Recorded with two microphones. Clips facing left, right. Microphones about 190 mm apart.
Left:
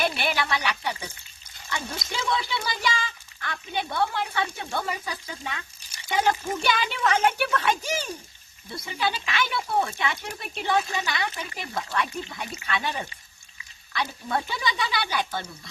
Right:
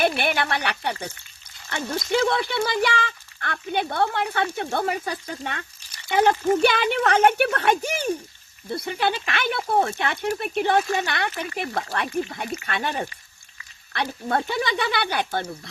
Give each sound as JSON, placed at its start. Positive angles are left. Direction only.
{"t": 0.0, "sound": "speech", "side_deg": -55}